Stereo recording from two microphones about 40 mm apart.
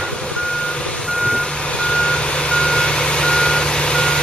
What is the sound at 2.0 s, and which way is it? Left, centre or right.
Reversing beeps, left.